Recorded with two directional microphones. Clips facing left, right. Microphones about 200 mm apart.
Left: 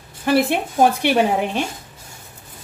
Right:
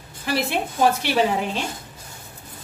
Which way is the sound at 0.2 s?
55° left (ahead or behind).